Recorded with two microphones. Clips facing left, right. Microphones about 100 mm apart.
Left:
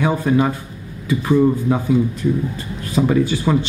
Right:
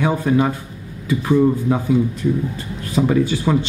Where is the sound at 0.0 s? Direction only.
20° left (ahead or behind).